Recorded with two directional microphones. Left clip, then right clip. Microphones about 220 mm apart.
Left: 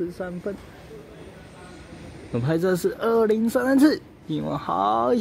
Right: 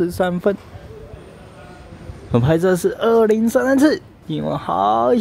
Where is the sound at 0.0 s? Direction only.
20° right (ahead or behind).